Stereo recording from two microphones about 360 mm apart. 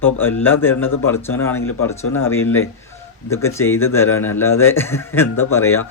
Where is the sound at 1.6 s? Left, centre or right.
Left.